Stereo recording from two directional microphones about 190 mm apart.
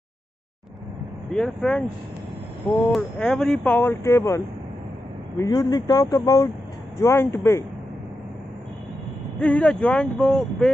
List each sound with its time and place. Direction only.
1.3 s speech: 5° left (ahead or behind)
2.9 s speech: centre (ahead or behind)
5.4 s speech: 20° left (ahead or behind)
9.4 s speech: 5° left (ahead or behind)